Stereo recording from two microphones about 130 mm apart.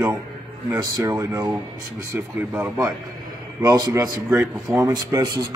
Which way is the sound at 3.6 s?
30° right (ahead or behind).